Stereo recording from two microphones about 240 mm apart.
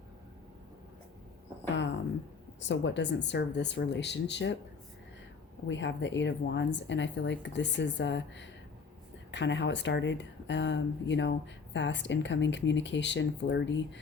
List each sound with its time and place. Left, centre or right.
2.6 s speech: left
5.6 s speech: left